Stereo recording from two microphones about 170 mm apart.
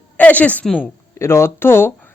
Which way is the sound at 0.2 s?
10° left (ahead or behind).